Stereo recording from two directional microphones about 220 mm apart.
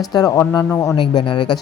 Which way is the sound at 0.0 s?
15° left (ahead or behind).